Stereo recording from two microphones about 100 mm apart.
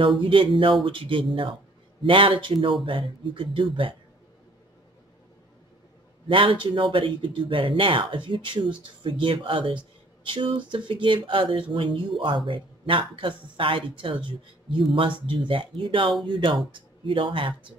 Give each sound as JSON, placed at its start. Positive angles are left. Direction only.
{"t": 0.2, "sound": "speech", "side_deg": -55}
{"t": 6.2, "sound": "speech", "side_deg": -60}